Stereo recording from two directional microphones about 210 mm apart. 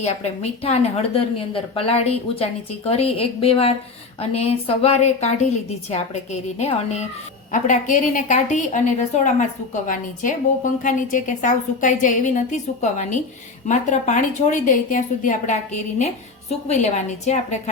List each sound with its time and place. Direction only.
0.0 s a woman's voice: 30° left (ahead or behind)
6.6 s a woman's voice: 30° left (ahead or behind)